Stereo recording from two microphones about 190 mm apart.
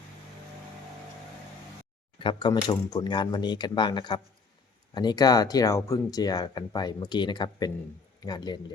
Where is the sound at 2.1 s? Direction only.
25° left (ahead or behind).